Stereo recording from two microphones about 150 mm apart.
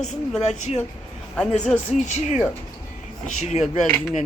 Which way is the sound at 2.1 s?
50° left (ahead or behind).